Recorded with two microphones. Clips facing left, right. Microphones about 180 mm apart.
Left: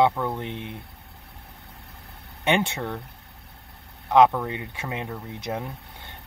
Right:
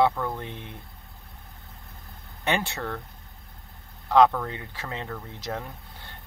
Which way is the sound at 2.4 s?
20° left (ahead or behind).